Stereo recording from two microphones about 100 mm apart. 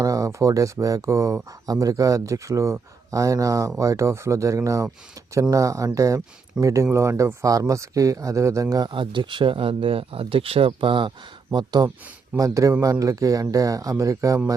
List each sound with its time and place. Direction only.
0.0 s speech: 35° right (ahead or behind)
8.9 s speech: 55° right (ahead or behind)
11.5 s speech: 45° right (ahead or behind)
12.4 s speech: 35° right (ahead or behind)